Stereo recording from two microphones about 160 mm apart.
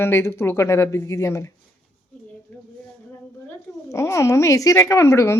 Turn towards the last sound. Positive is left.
turn(degrees=15)  # may be behind; listen again after turning